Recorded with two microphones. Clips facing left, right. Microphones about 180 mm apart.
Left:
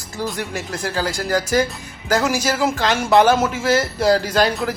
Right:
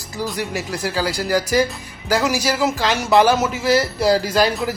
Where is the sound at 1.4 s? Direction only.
45° left (ahead or behind).